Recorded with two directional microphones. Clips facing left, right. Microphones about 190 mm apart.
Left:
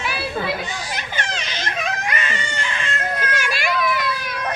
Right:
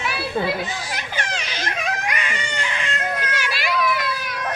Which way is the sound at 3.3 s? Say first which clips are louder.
Left 2 dB; 45° left (ahead or behind).